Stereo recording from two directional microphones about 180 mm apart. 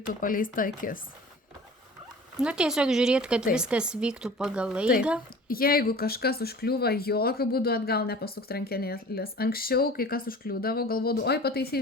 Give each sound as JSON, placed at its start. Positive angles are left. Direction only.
{"t": 0.2, "sound": "speech", "side_deg": 50}
{"t": 2.4, "sound": "speech", "side_deg": -5}
{"t": 5.5, "sound": "speech", "side_deg": 55}